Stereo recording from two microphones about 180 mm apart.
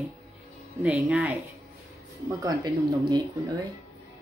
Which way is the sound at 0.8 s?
5° right (ahead or behind).